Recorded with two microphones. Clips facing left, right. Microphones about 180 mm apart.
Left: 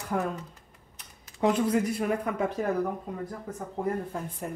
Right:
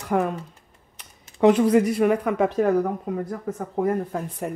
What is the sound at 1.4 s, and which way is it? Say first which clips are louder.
Speech: right 8 dB; 75° right (ahead or behind).